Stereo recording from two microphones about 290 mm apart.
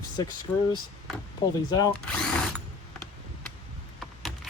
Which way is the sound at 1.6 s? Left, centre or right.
Centre.